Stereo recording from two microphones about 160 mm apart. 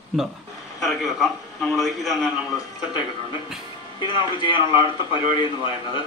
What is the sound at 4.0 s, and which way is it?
Speech, 30° left (ahead or behind).